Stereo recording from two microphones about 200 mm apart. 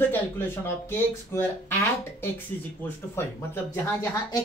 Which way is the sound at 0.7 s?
10° left (ahead or behind).